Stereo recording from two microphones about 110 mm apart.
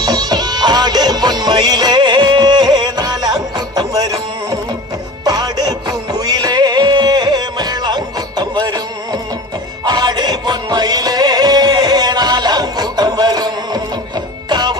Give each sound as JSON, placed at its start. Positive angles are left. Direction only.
{"t": 0.0, "sound": "music", "side_deg": -40}